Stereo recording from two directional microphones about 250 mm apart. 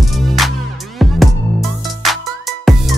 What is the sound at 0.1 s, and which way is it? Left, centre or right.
Music, centre.